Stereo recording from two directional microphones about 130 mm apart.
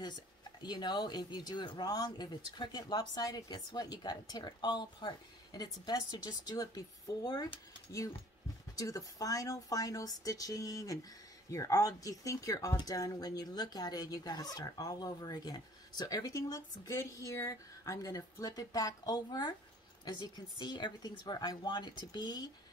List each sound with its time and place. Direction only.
0.0 s speech: 35° left (ahead or behind)